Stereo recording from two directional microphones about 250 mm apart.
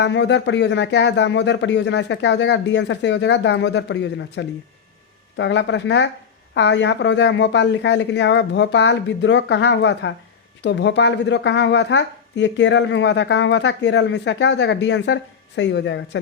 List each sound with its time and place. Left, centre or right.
0.0 s a woman's voice: left